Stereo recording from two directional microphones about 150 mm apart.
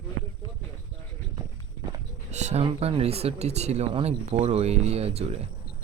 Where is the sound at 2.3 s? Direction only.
50° right (ahead or behind).